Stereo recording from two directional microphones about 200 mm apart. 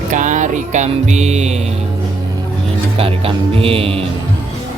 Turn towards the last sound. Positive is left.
turn(degrees=-30)  # may be behind; listen again after turning